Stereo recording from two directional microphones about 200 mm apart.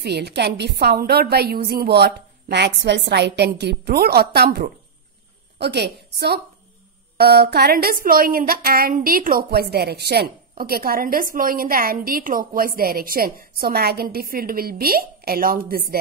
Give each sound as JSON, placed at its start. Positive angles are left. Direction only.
{"t": 0.0, "sound": "a woman's voice", "side_deg": -55}